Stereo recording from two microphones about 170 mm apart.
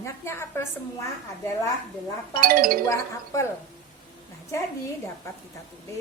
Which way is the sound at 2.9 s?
15° left (ahead or behind).